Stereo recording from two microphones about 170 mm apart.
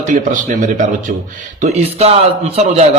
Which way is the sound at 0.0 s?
45° right (ahead or behind).